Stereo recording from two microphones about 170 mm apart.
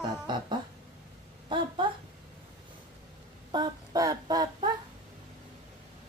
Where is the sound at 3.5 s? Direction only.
25° right (ahead or behind).